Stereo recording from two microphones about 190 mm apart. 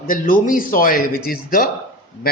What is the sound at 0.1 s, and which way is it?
A man's voice, 45° left (ahead or behind).